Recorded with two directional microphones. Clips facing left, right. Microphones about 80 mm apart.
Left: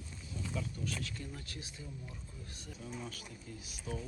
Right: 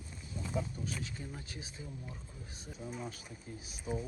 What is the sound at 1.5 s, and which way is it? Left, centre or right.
Speech, right.